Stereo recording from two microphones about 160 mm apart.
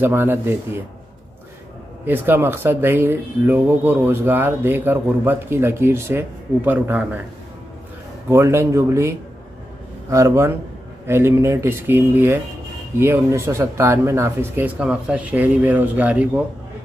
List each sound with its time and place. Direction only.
0.0 s speech: 15° right (ahead or behind)
2.0 s speech: 15° right (ahead or behind)
8.3 s speech: 15° right (ahead or behind)